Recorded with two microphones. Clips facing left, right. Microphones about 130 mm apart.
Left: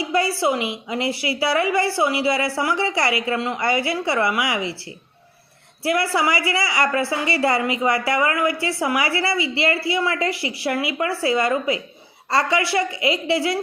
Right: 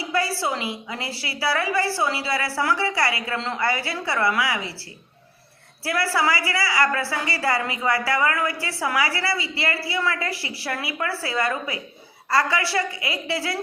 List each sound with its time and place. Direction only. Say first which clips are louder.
0.0 s a woman's voice: left 4 dB; 20° left (ahead or behind)
5.8 s a woman's voice: left 3 dB; 20° left (ahead or behind)